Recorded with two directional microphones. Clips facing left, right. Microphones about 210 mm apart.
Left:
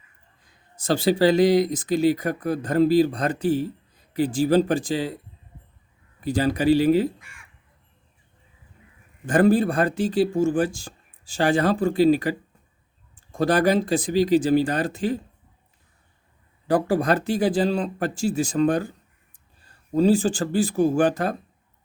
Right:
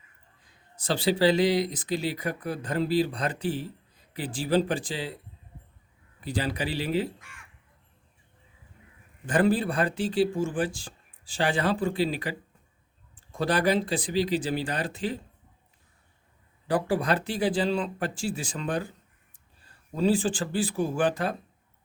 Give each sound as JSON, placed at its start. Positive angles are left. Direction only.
{"t": 0.8, "sound": "speech", "side_deg": 45}
{"t": 6.1, "sound": "speech", "side_deg": 45}
{"t": 9.2, "sound": "speech", "side_deg": 45}
{"t": 16.6, "sound": "speech", "side_deg": 45}